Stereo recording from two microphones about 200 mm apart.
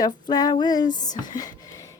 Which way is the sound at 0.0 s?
20° left (ahead or behind).